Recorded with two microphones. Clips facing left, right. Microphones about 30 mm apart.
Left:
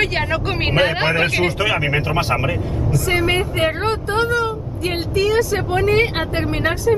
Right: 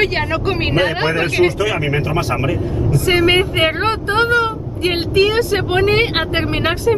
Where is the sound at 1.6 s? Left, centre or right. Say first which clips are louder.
Right 1 dB; left.